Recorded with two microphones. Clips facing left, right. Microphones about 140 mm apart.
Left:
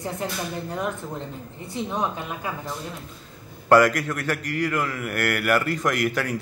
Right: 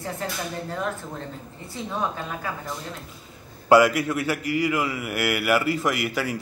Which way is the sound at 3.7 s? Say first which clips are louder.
Even; 10° right (ahead or behind).